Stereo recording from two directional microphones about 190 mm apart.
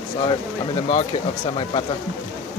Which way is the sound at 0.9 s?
35° left (ahead or behind).